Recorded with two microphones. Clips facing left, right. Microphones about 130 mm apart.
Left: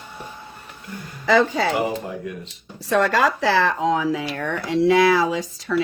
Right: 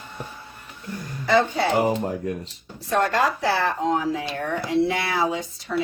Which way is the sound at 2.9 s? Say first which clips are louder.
Left 3 dB; 90° left.